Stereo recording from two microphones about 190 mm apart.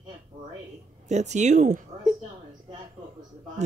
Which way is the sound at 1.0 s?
40° right (ahead or behind).